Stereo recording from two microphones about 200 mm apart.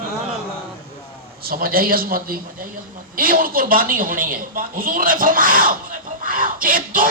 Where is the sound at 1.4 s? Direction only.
45° right (ahead or behind).